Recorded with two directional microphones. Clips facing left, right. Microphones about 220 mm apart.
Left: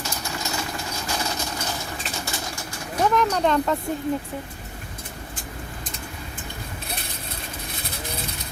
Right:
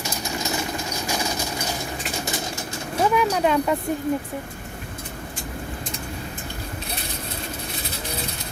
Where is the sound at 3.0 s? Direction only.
10° right (ahead or behind).